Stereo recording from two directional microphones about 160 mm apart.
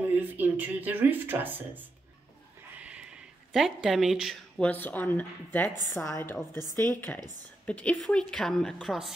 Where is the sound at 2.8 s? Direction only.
5° right (ahead or behind).